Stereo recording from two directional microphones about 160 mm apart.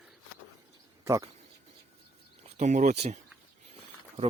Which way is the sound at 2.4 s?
45° right (ahead or behind).